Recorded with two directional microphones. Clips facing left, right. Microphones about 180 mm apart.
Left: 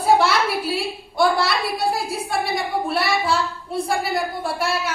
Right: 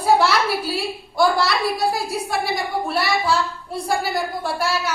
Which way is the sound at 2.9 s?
30° left (ahead or behind).